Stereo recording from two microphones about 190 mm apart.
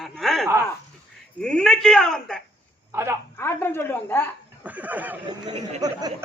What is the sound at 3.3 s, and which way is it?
Speech, 10° left (ahead or behind).